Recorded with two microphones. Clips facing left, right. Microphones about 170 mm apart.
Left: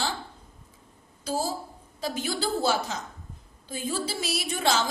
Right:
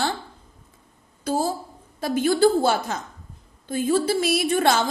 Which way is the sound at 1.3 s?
55° right (ahead or behind).